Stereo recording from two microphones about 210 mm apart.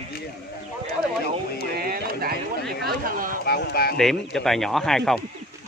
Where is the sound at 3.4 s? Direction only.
50° left (ahead or behind).